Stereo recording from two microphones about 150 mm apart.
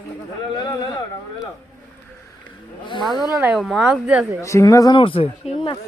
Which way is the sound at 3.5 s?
Centre (ahead or behind).